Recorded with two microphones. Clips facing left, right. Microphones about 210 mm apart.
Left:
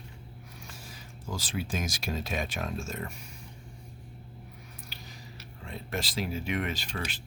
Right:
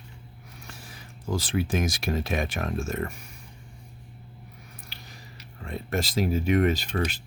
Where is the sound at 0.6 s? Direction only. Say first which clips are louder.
Right 4 dB; 60° right (ahead or behind).